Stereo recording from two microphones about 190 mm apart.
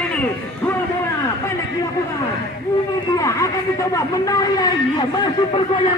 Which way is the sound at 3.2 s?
15° left (ahead or behind).